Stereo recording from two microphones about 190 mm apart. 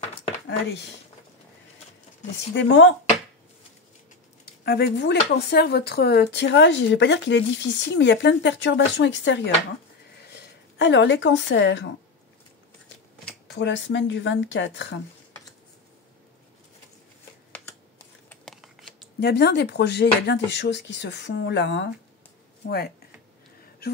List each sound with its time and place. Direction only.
0.5 s speech: 60° left (ahead or behind)
2.5 s speech: 75° left (ahead or behind)
4.6 s speech: 60° left (ahead or behind)
13.6 s speech: 70° left (ahead or behind)
18.3 s a sound: centre (ahead or behind)
19.1 s speech: 60° left (ahead or behind)